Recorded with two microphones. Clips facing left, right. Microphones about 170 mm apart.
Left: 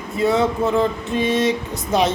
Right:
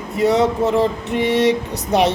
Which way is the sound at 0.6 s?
20° right (ahead or behind).